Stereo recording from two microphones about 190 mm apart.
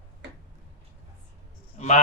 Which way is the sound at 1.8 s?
40° left (ahead or behind).